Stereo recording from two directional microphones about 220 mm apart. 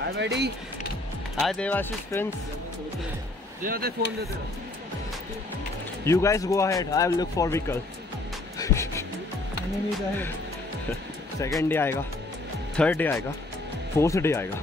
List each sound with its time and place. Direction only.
0.0 s speech: 50° right (ahead or behind)
1.4 s speech: 5° left (ahead or behind)
3.6 s speech: 40° right (ahead or behind)
6.0 s speech: 15° left (ahead or behind)
8.5 s music: 15° left (ahead or behind)
11.4 s speech: 10° left (ahead or behind)